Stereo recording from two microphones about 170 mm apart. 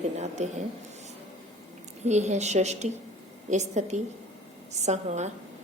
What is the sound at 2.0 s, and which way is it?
Speech, 40° right (ahead or behind).